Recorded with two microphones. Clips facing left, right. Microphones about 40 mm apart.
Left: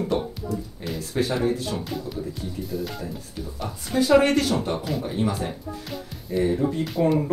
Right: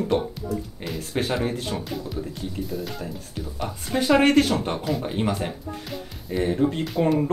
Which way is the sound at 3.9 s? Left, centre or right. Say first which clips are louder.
Even; right.